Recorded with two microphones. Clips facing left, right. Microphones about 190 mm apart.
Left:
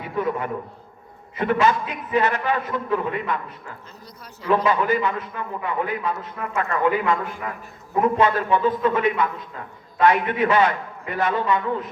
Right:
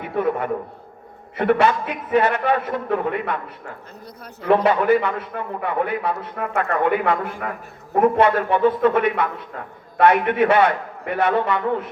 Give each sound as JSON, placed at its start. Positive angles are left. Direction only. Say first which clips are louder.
{"t": 0.2, "sound": "a man's voice", "louder": "right 3 dB", "side_deg": -60}